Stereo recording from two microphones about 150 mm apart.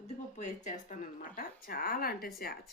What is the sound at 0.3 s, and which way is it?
Speech, 55° left (ahead or behind).